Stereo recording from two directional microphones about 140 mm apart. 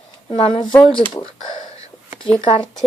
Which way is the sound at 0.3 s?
35° left (ahead or behind).